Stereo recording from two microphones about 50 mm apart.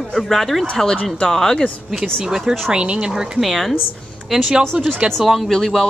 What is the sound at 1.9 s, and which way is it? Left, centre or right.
A woman's voice, centre.